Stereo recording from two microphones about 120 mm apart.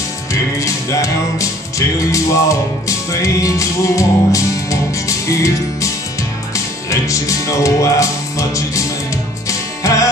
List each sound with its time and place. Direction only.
0.3 s music: 25° left (ahead or behind)